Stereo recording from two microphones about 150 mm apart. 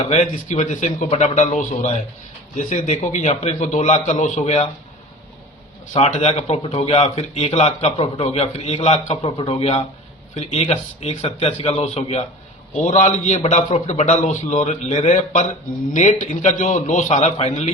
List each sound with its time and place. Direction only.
0.0 s a man's voice: 50° left (ahead or behind)
6.0 s a man's voice: 45° left (ahead or behind)